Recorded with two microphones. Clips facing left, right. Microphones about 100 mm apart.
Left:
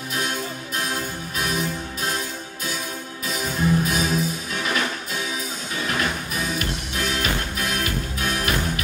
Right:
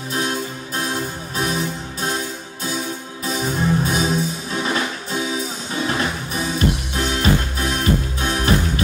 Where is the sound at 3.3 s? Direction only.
30° right (ahead or behind).